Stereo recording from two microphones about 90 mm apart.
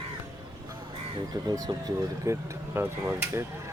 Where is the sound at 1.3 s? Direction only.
50° right (ahead or behind).